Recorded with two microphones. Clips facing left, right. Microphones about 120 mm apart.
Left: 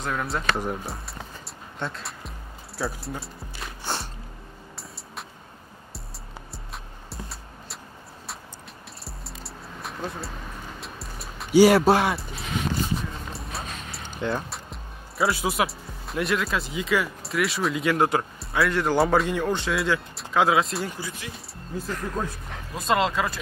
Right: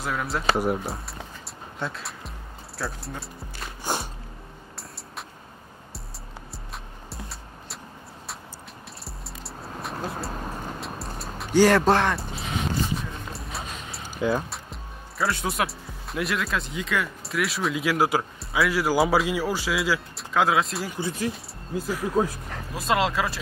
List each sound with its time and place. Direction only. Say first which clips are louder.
0.0 s speech: right 1 dB; centre (ahead or behind)
3.8 s music: right 3 dB; 10° right (ahead or behind)
7.1 s music: left 1 dB; centre (ahead or behind)
9.0 s music: left 1 dB; centre (ahead or behind)
10.3 s speech: right 5 dB; 45° right (ahead or behind)
10.8 s music: right 4 dB; centre (ahead or behind)
11.5 s speech: left 2 dB; 10° left (ahead or behind)
21.2 s speech: right 10 dB; 40° right (ahead or behind)
21.7 s speech: right 5 dB; 5° right (ahead or behind)